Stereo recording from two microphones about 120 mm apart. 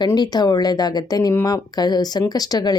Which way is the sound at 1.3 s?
20° left (ahead or behind).